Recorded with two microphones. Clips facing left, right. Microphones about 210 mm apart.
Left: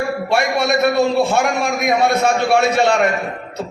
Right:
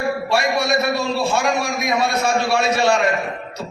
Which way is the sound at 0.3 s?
55° left (ahead or behind).